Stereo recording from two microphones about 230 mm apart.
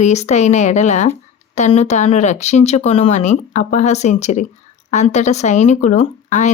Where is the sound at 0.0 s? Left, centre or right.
Left.